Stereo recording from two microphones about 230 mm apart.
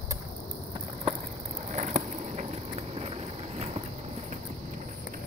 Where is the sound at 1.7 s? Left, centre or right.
Right.